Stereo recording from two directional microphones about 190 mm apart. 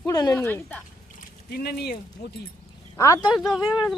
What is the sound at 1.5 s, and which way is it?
Speech, 55° left (ahead or behind).